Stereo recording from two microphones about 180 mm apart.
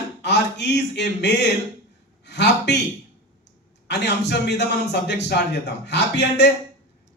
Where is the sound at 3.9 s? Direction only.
75° left (ahead or behind).